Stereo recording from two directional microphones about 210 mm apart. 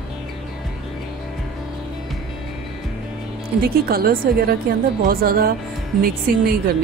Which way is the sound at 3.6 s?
45° right (ahead or behind).